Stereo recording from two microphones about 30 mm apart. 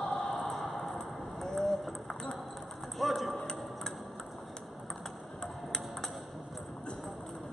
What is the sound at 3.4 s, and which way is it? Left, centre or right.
Tick-tock, left.